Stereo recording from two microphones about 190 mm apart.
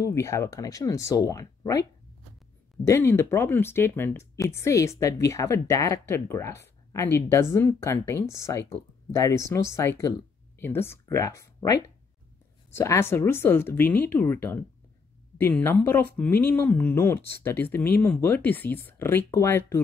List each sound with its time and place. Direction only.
0.0 s speech: 15° left (ahead or behind)